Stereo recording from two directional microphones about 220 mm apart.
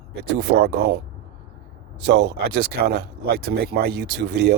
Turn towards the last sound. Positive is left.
turn(degrees=-50)  # may be behind; listen again after turning